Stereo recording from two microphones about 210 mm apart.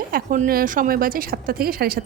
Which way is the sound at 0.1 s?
40° right (ahead or behind).